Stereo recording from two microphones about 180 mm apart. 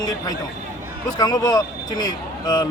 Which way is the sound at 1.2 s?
25° left (ahead or behind).